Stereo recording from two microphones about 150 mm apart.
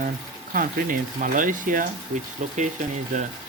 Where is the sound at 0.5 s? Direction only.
70° right (ahead or behind).